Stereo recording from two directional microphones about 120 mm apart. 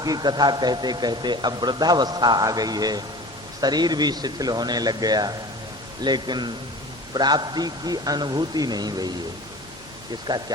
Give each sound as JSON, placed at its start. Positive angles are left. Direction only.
{"t": 0.0, "sound": "speech", "side_deg": -35}
{"t": 10.3, "sound": "speech", "side_deg": -40}